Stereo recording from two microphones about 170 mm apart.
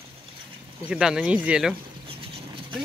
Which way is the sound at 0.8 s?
5° right (ahead or behind).